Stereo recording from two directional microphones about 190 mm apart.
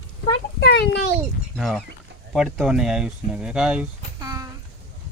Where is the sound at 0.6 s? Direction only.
60° left (ahead or behind).